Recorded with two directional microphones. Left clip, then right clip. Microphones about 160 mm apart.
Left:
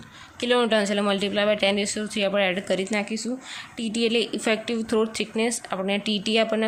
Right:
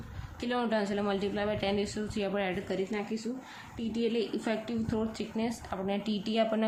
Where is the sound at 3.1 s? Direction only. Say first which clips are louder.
Left 7 dB; 50° left (ahead or behind); by 6.7 s 20° left (ahead or behind).